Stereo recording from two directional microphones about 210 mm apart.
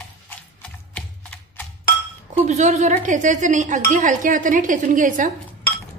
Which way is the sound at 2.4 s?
35° right (ahead or behind).